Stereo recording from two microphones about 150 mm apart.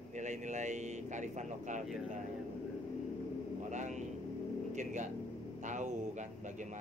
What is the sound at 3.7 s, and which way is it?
Speech, 55° right (ahead or behind).